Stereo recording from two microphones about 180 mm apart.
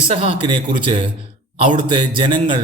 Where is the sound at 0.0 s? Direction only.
30° right (ahead or behind).